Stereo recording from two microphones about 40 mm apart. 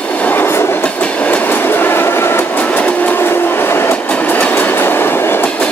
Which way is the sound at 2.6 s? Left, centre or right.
Left.